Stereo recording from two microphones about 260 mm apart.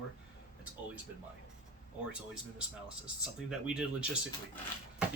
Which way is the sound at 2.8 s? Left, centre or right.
Centre.